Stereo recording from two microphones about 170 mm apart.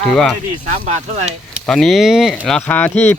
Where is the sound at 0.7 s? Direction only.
40° right (ahead or behind).